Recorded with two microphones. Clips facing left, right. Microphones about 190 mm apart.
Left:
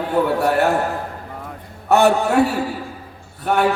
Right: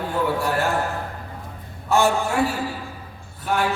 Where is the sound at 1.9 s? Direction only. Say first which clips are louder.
Left 5 dB; 65° left (ahead or behind).